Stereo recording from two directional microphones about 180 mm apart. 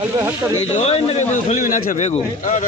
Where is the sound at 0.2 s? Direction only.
15° right (ahead or behind).